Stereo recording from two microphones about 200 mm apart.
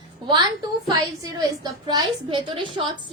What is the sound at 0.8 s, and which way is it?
A woman's voice, 20° right (ahead or behind).